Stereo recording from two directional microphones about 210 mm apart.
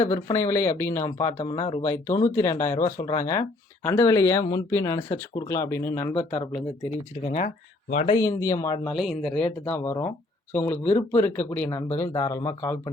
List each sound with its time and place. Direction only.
0.0 s speech: 10° left (ahead or behind)
1.4 s speech: 25° left (ahead or behind)
1.8 s speech: 10° left (ahead or behind)
7.3 s speech: 35° left (ahead or behind)
8.1 s speech: 15° left (ahead or behind)
8.9 s speech: centre (ahead or behind); by 12.9 s 15° left (ahead or behind)